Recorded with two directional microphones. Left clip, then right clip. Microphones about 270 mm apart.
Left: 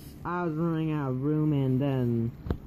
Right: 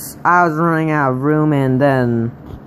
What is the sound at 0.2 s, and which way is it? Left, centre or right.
Speech, centre.